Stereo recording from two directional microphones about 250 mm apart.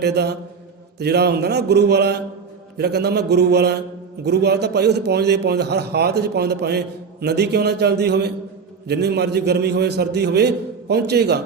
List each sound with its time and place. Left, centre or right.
0.0 s a man's voice: right